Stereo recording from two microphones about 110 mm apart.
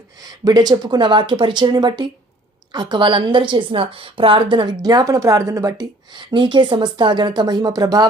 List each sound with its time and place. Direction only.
0.2 s a woman's voice: 35° right (ahead or behind)
6.1 s a woman's voice: 45° right (ahead or behind)